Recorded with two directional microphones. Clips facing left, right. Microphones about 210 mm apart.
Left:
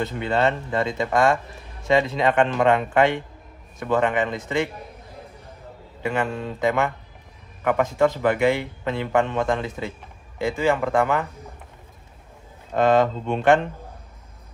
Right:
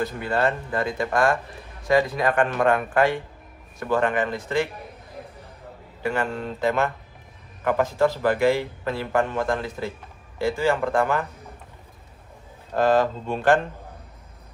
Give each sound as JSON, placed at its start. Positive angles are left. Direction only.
{"t": 0.0, "sound": "speech", "side_deg": 25}
{"t": 6.0, "sound": "speech", "side_deg": 20}
{"t": 12.7, "sound": "speech", "side_deg": 20}